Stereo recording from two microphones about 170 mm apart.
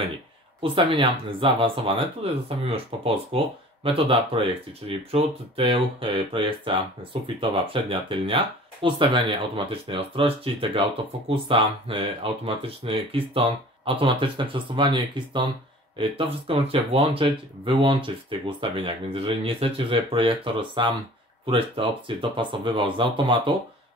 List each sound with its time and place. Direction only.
0.6 s speech: 30° right (ahead or behind)